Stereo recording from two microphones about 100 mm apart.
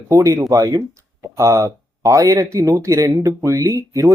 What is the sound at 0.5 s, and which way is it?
Speech, 35° right (ahead or behind).